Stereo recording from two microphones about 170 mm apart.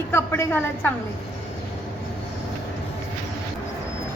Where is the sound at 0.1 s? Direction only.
15° left (ahead or behind).